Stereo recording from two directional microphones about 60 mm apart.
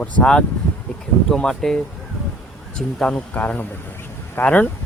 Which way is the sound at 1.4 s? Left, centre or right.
Centre.